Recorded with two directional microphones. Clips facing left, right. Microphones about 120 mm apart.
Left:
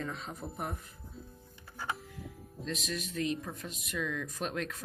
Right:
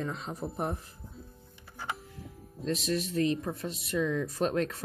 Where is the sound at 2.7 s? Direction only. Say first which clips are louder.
Right 7 dB; 35° right (ahead or behind).